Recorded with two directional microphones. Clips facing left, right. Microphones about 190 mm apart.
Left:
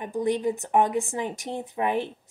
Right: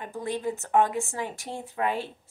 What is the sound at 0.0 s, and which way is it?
Speech, 15° left (ahead or behind).